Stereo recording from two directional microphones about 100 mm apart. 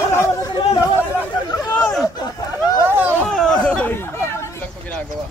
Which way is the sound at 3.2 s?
10° left (ahead or behind).